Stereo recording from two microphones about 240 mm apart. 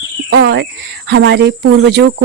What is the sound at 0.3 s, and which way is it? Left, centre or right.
Speech, right.